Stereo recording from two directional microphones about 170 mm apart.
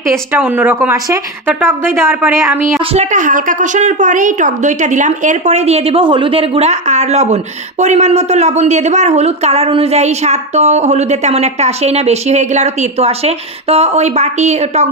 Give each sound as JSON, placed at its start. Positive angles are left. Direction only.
{"t": 0.1, "sound": "speech", "side_deg": -10}
{"t": 2.9, "sound": "a woman's voice", "side_deg": -45}